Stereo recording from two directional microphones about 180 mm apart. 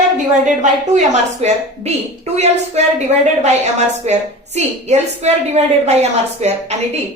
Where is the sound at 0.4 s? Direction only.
45° right (ahead or behind).